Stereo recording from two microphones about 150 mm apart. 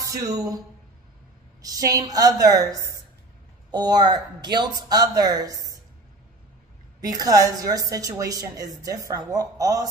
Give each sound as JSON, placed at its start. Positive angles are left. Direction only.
{"t": 0.0, "sound": "speech", "side_deg": -20}
{"t": 1.6, "sound": "a woman's voice", "side_deg": -25}
{"t": 7.0, "sound": "a woman's voice", "side_deg": -25}